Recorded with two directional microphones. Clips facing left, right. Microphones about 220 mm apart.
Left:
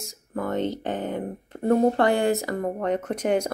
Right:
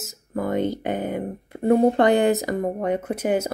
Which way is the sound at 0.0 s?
10° right (ahead or behind).